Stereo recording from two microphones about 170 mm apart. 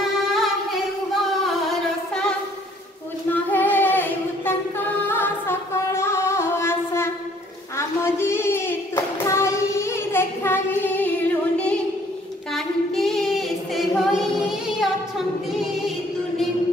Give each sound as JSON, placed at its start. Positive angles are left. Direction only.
{"t": 0.0, "sound": "singing", "side_deg": 0}
{"t": 3.3, "sound": "female singing", "side_deg": 10}
{"t": 7.7, "sound": "child singing", "side_deg": 15}